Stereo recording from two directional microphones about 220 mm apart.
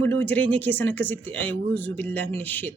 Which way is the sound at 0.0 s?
10° left (ahead or behind).